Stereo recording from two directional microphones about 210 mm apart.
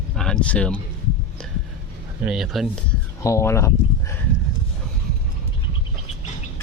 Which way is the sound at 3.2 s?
15° left (ahead or behind).